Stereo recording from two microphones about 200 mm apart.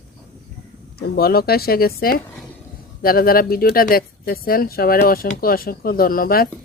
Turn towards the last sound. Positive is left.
turn(degrees=45)  # may be behind; listen again after turning